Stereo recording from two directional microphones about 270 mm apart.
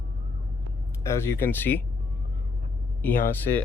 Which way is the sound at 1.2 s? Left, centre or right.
Centre.